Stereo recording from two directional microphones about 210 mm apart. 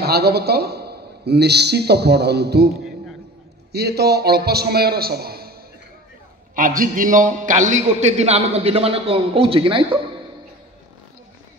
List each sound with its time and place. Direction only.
0.0 s a man's voice: 50° right (ahead or behind)
3.7 s a man's voice: 50° right (ahead or behind)
6.5 s a man's voice: 40° right (ahead or behind); by 9.8 s 25° right (ahead or behind)